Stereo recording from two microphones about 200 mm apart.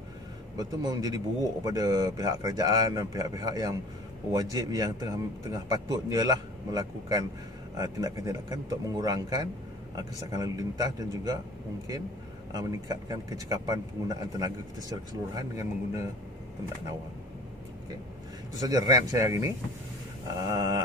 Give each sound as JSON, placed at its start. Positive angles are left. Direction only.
{"t": 0.6, "sound": "a man's voice", "side_deg": -20}
{"t": 12.5, "sound": "a man's voice", "side_deg": -20}
{"t": 18.7, "sound": "a man's voice", "side_deg": -15}